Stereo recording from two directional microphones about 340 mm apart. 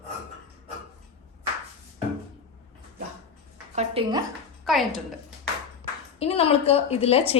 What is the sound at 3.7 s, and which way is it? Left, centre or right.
Speech, centre.